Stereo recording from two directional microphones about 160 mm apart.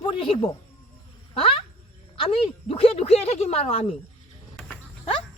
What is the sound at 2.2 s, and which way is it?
Speech, 35° left (ahead or behind).